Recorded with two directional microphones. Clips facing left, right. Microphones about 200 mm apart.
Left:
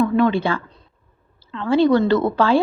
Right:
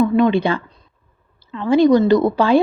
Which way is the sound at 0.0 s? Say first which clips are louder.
Right 2 dB; 15° right (ahead or behind).